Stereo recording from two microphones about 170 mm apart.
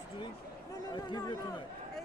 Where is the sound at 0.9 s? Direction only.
25° left (ahead or behind).